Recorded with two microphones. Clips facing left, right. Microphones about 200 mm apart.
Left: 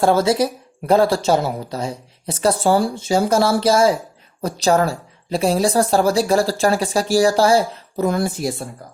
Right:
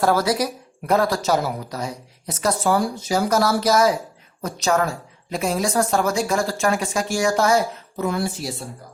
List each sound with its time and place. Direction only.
0.0 s a woman's voice: 25° left (ahead or behind); by 8.6 s 50° left (ahead or behind)